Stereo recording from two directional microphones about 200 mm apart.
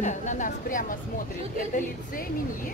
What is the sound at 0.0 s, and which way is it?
Speech, 40° left (ahead or behind).